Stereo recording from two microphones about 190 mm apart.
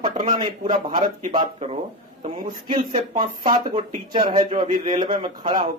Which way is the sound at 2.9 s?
40° right (ahead or behind).